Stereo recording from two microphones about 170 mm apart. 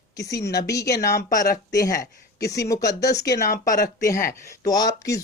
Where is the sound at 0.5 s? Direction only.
20° left (ahead or behind).